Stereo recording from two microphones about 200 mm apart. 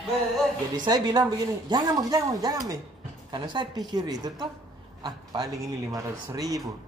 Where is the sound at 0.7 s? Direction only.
20° right (ahead or behind).